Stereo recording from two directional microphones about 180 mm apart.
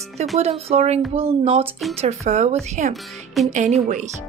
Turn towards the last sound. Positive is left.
turn(degrees=-40)  # may be behind; listen again after turning